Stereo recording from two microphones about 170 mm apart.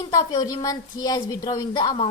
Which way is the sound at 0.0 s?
25° left (ahead or behind).